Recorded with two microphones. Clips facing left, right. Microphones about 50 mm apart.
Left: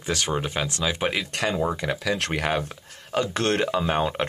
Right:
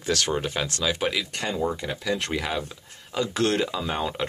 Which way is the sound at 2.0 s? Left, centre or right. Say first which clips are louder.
Left 1 dB; left.